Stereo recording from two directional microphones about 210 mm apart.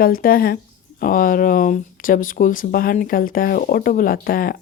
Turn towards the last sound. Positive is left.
turn(degrees=45)  # may be behind; listen again after turning